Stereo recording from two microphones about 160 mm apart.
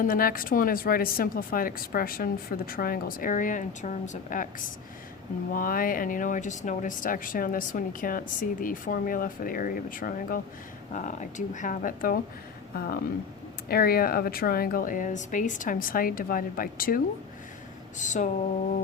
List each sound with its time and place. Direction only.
0.0 s speech: 60° left (ahead or behind)
5.5 s speech: 60° left (ahead or behind)
10.9 s speech: 50° left (ahead or behind)
12.7 s speech: 70° left (ahead or behind)
17.9 s speech: 50° left (ahead or behind)